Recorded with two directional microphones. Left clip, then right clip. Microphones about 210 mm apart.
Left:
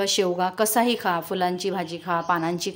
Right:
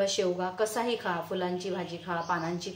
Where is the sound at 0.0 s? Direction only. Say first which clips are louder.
Left 6 dB; 55° left (ahead or behind).